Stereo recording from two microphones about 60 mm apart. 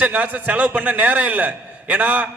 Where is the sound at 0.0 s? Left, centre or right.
Right.